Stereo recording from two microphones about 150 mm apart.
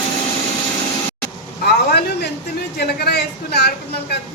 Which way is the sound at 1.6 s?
90° left.